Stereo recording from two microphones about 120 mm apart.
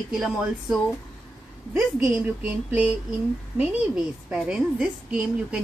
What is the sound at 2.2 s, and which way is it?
A woman's voice, 10° right (ahead or behind).